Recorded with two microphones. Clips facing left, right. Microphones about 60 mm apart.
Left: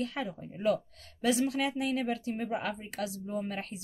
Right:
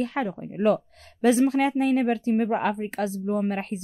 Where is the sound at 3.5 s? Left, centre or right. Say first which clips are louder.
Right 9 dB; right.